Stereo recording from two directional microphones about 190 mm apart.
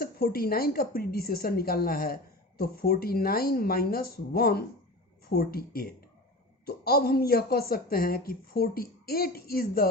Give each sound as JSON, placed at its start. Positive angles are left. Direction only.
{"t": 0.0, "sound": "speech", "side_deg": 50}